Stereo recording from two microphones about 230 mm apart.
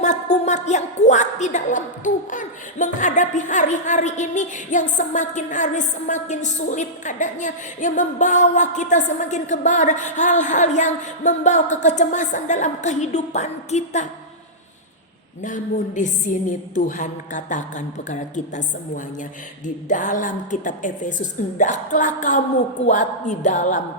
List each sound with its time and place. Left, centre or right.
0.0 s a woman's voice: left
15.4 s a woman's voice: left